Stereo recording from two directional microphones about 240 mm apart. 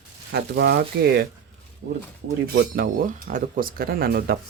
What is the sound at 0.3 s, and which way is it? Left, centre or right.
Speech, right.